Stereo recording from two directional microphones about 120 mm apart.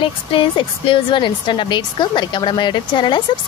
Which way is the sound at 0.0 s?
45° left (ahead or behind).